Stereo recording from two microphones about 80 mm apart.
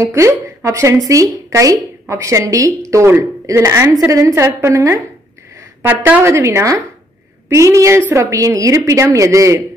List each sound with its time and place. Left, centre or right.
0.0 s a woman's voice: right
5.8 s a woman's voice: right
6.2 s a woman's voice: right